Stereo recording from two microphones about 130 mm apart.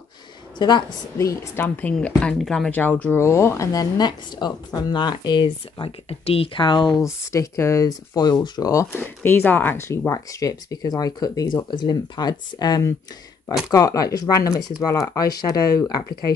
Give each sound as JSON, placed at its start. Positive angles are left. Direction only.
{"t": 0.6, "sound": "a woman's voice", "side_deg": 35}
{"t": 1.1, "sound": "speech", "side_deg": 25}
{"t": 1.8, "sound": "a woman's voice", "side_deg": 10}
{"t": 7.3, "sound": "speech", "side_deg": 25}
{"t": 8.9, "sound": "speech", "side_deg": 15}